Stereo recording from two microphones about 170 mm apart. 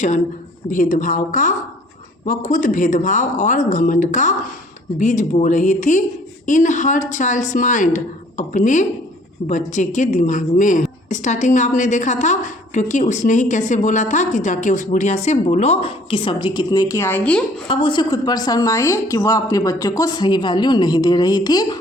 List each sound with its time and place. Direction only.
0.7 s a woman's voice: 50° left (ahead or behind); by 17.4 s 10° left (ahead or behind)
17.7 s a woman's voice: 30° left (ahead or behind)